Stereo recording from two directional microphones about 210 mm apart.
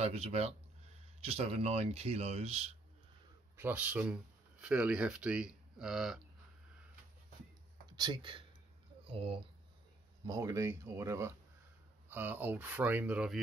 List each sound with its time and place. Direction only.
0.0 s speech: 30° right (ahead or behind)
3.5 s speech: 10° right (ahead or behind)
7.9 s speech: 20° right (ahead or behind)
10.2 s speech: 15° right (ahead or behind)